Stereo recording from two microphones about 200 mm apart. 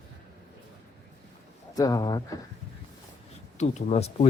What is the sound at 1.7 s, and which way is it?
Speech, 15° left (ahead or behind).